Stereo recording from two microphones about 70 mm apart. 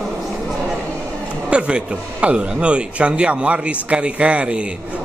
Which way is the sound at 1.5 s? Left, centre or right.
Centre.